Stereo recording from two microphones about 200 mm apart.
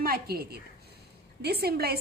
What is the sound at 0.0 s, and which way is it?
A woman's voice, 50° right (ahead or behind).